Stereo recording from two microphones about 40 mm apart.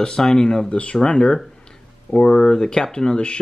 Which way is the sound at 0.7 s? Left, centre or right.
Left.